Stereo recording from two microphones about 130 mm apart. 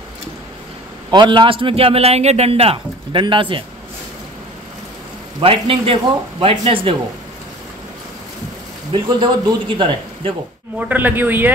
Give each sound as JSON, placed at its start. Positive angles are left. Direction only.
{"t": 1.1, "sound": "a man's voice", "side_deg": -40}
{"t": 5.4, "sound": "a man's voice", "side_deg": -45}
{"t": 8.9, "sound": "a man's voice", "side_deg": -35}
{"t": 10.9, "sound": "a man's voice", "side_deg": -15}